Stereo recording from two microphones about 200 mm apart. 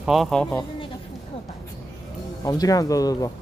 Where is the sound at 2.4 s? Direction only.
20° left (ahead or behind).